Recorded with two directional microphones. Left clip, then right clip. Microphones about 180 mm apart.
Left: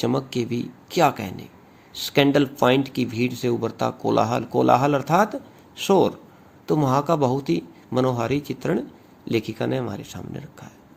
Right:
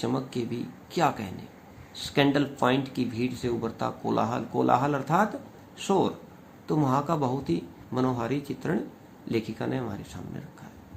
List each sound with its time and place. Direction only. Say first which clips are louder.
0.0 s speech: left 6 dB; 50° left (ahead or behind)